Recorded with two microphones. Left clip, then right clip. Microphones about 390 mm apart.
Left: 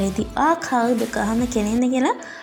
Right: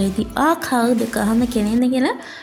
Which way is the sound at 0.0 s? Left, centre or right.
Right.